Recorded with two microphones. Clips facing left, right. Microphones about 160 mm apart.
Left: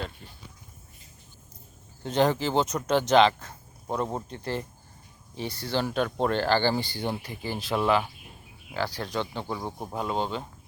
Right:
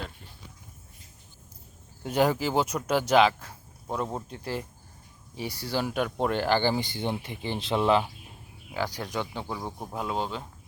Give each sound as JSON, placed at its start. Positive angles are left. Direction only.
{"t": 2.0, "sound": "speech", "side_deg": -10}
{"t": 8.7, "sound": "speech", "side_deg": -15}
{"t": 9.6, "sound": "speech", "side_deg": 5}